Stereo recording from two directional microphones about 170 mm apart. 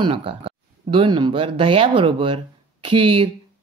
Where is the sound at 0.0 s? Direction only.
30° right (ahead or behind).